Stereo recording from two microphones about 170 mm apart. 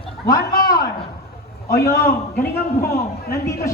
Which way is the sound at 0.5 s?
60° left (ahead or behind).